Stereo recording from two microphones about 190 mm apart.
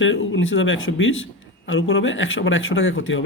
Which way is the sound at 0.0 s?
80° left.